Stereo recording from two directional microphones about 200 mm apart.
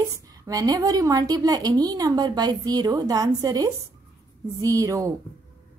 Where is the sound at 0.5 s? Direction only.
20° right (ahead or behind).